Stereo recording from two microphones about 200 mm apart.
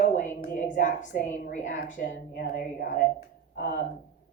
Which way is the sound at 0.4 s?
40° left (ahead or behind).